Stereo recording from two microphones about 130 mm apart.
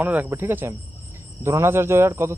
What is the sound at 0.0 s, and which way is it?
Speech, 15° right (ahead or behind).